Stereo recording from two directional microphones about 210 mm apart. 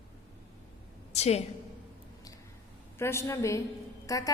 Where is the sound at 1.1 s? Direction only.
30° left (ahead or behind).